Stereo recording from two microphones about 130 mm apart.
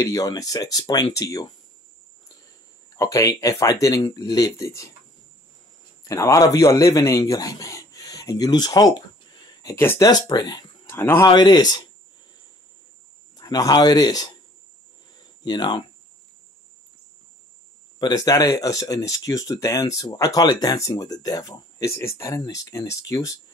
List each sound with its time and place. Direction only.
0.0 s speech: 25° left (ahead or behind)
2.9 s speech: 25° left (ahead or behind)
6.0 s a man's voice: 25° left (ahead or behind)
9.8 s speech: 15° left (ahead or behind)
10.0 s speech: 30° left (ahead or behind)
10.9 s speech: 20° left (ahead or behind)
11.2 s speech: 35° left (ahead or behind)
13.4 s speech: 30° left (ahead or behind)
15.4 s speech: 35° left (ahead or behind)
17.9 s speech: 30° left (ahead or behind)